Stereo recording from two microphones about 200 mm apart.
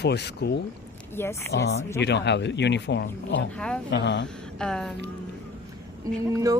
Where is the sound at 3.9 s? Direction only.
60° left (ahead or behind).